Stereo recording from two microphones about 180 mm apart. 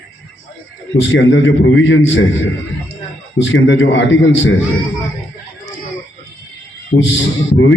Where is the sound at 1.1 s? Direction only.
90° left.